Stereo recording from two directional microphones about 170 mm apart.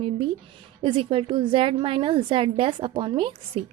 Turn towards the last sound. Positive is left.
turn(degrees=-35)  # may be behind; listen again after turning